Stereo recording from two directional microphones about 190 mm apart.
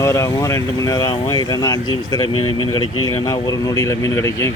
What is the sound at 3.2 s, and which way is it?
Speech, 20° left (ahead or behind).